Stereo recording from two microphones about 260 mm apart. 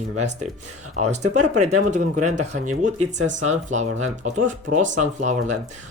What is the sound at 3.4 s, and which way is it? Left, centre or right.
Speech, right.